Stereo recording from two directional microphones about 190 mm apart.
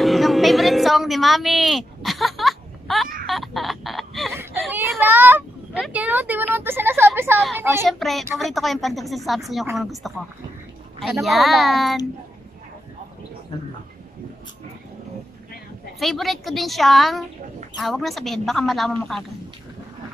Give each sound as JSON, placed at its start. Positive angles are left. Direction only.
{"t": 0.0, "sound": "a sound", "side_deg": 0}
{"t": 3.3, "sound": "a woman's voice", "side_deg": 0}
{"t": 4.7, "sound": "a child's voice", "side_deg": -10}
{"t": 7.8, "sound": "a woman's voice", "side_deg": 0}
{"t": 16.0, "sound": "a woman's voice", "side_deg": 0}